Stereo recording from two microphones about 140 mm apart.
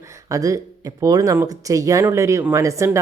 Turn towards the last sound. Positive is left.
turn(degrees=-20)  # may be behind; listen again after turning